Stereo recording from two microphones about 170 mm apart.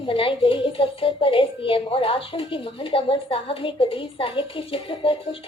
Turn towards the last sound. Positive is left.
turn(degrees=30)  # may be behind; listen again after turning